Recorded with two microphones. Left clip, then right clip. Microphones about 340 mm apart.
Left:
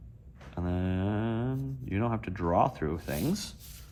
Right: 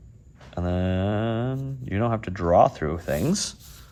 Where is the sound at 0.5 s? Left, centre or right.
Right.